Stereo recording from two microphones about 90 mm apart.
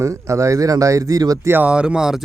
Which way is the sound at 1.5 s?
20° right (ahead or behind).